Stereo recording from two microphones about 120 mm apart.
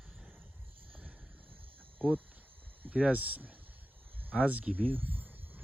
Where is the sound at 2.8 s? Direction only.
15° right (ahead or behind).